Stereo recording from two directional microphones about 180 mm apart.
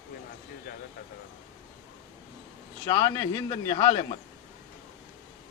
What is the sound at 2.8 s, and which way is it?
Speech, 30° left (ahead or behind).